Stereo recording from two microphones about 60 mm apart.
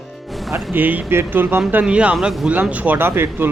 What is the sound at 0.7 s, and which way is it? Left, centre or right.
Speech, right.